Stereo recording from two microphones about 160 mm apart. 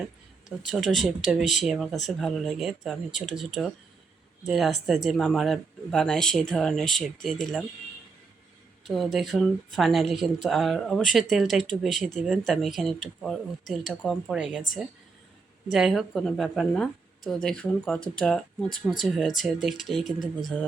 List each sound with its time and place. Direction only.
0.7 s speech: centre (ahead or behind)
3.1 s speech: 50° left (ahead or behind)
3.3 s speech: centre (ahead or behind)
8.8 s speech: centre (ahead or behind)